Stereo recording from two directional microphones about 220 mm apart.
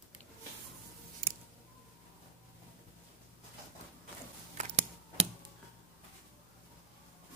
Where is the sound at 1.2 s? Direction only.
40° right (ahead or behind).